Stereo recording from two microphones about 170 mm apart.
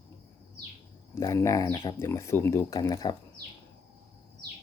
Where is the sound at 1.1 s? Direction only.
20° left (ahead or behind).